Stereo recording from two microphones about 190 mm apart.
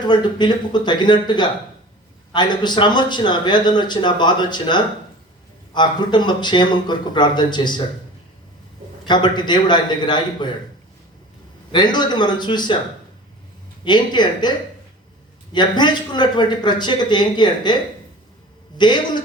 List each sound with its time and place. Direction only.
0.0 s speech: 25° left (ahead or behind)
9.0 s speech: 25° left (ahead or behind)
11.7 s speech: 25° left (ahead or behind)
13.8 s speech: 25° left (ahead or behind)
15.5 s speech: 25° left (ahead or behind)
18.8 s speech: 25° left (ahead or behind)